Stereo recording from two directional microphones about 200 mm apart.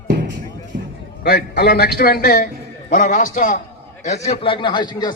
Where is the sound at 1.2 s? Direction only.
50° left (ahead or behind); by 5.1 s 20° left (ahead or behind).